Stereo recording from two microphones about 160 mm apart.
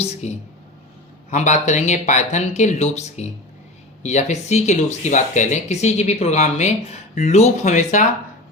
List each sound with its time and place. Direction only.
0.0 s speech: 40° left (ahead or behind)